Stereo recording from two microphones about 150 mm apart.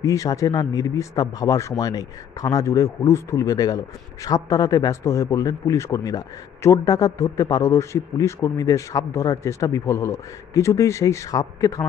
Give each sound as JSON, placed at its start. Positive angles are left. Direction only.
{"t": 0.0, "sound": "speech", "side_deg": 20}